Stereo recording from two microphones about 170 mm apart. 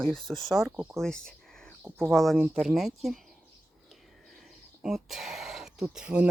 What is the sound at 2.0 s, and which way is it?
Speech, centre (ahead or behind).